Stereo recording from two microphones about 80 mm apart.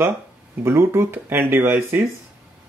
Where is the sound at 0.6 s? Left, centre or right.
Right.